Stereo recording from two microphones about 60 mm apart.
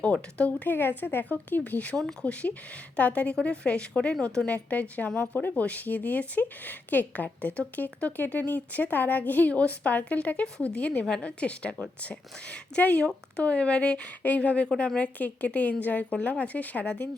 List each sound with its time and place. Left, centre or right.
0.0 s speech: left
0.7 s speech: left; by 4.5 s centre
4.5 s speech: left